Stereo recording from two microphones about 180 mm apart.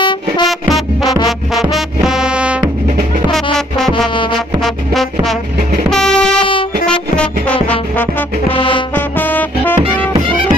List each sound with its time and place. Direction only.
0.5 s music: centre (ahead or behind)
5.9 s train: 5° left (ahead or behind)
6.9 s music: 5° left (ahead or behind)
8.5 s music: 30° left (ahead or behind)
8.9 s music: 10° left (ahead or behind)